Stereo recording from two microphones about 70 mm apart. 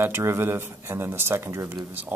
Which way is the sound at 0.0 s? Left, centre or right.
Right.